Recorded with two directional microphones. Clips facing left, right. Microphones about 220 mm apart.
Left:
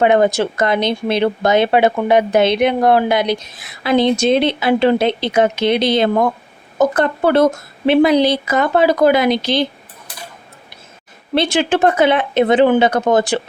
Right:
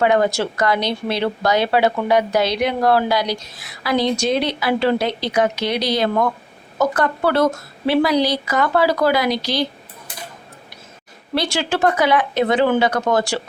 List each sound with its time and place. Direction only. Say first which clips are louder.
0.0 s speech: left 4 dB; 20° left (ahead or behind)
11.3 s speech: left 5 dB; 20° left (ahead or behind)